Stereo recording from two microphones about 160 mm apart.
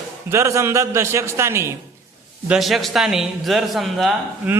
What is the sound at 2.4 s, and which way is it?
A man's voice, centre (ahead or behind).